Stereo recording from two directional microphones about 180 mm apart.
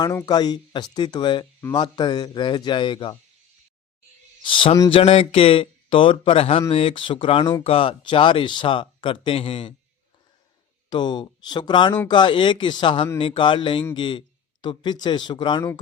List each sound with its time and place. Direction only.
0.0 s speech: 20° left (ahead or behind)
4.4 s speech: 30° left (ahead or behind)
10.8 s speech: 25° left (ahead or behind)